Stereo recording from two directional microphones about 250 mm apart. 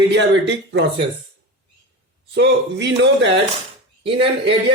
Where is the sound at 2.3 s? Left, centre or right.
Right.